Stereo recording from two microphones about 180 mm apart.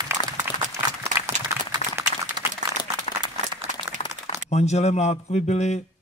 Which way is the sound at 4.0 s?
35° left (ahead or behind).